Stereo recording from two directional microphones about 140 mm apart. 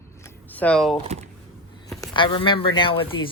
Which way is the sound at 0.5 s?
10° left (ahead or behind).